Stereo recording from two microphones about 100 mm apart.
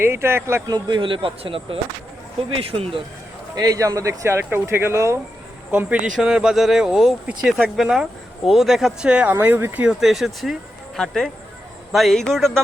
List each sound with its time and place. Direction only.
0.0 s speech: 25° right (ahead or behind)
0.7 s speech: 50° right (ahead or behind); by 3.0 s 75° right (ahead or behind)
3.5 s speech: 35° right (ahead or behind)
5.7 s speech: 15° right (ahead or behind)
9.9 s speech: 5° right (ahead or behind)